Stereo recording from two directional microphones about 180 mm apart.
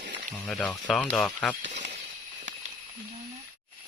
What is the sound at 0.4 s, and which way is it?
Speech, 5° left (ahead or behind).